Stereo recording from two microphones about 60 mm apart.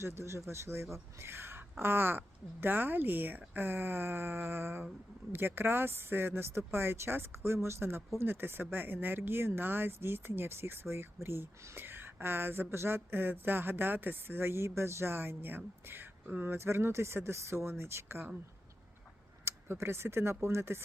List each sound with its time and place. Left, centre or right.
0.0 s speech: right
19.5 s speech: right